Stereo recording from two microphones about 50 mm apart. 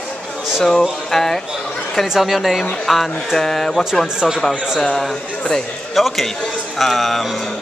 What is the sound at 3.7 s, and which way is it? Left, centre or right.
Speech, centre.